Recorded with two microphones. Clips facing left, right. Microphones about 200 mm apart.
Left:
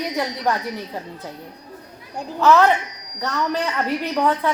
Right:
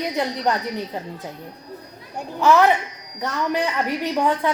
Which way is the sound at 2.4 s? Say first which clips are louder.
Left 1 dB; 15° right (ahead or behind).